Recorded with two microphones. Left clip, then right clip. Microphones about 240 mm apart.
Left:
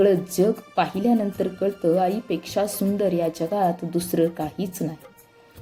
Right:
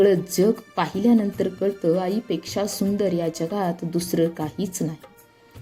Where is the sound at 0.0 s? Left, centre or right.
Right.